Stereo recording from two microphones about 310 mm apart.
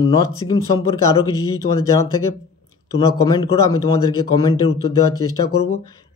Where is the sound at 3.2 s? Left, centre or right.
Centre.